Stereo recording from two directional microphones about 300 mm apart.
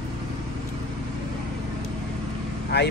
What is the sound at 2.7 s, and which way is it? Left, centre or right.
Speech, left.